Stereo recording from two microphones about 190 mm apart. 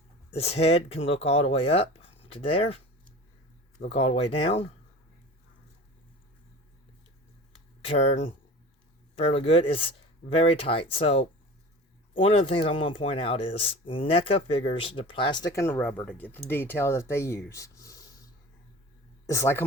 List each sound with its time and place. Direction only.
0.3 s speech: 35° left (ahead or behind)
3.8 s speech: 30° left (ahead or behind)
7.9 s speech: 35° left (ahead or behind); by 19.6 s 15° left (ahead or behind)